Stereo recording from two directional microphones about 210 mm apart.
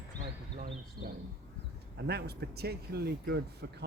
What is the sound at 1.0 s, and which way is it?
Speech, 45° right (ahead or behind).